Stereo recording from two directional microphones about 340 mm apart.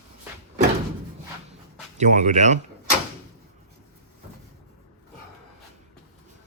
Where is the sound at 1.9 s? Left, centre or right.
Right.